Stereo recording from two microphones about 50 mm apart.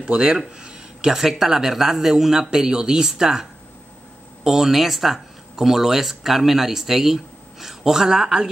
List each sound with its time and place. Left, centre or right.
0.0 s speech: right
4.5 s speech: centre